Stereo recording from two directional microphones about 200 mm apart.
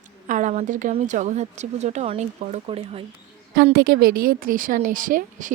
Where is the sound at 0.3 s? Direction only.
40° right (ahead or behind).